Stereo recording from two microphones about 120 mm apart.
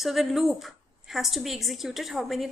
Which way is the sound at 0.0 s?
5° right (ahead or behind).